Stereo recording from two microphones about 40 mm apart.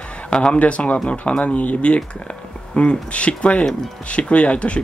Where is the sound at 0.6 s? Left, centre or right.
Left.